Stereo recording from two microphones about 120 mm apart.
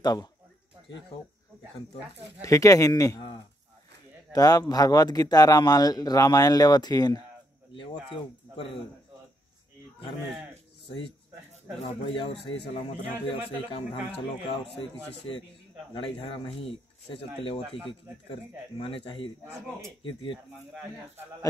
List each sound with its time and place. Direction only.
0.0 s speech: 35° left (ahead or behind)
2.4 s speech: 25° left (ahead or behind)
11.8 s speech: 50° left (ahead or behind)
15.9 s speech: 40° left (ahead or behind)
18.8 s speech: 45° left (ahead or behind)